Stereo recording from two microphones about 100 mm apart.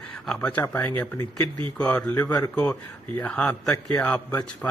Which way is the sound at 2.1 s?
35° left (ahead or behind).